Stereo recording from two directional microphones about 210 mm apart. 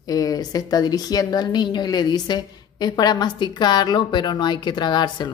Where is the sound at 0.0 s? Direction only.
15° left (ahead or behind).